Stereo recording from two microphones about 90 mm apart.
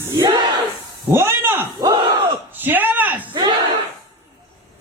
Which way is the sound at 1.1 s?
25° right (ahead or behind).